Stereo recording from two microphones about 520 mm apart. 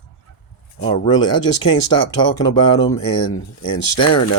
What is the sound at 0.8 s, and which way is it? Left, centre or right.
Speech, centre.